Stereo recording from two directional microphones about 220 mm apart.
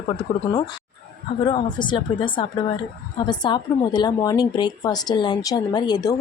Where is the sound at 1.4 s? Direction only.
20° left (ahead or behind).